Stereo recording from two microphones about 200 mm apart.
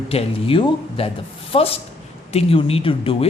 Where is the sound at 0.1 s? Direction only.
30° left (ahead or behind).